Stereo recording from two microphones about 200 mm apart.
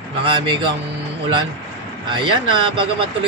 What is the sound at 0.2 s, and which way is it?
Speech, 25° right (ahead or behind).